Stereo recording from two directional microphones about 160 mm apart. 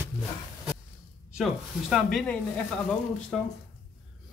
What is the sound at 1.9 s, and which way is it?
Speech, 5° left (ahead or behind).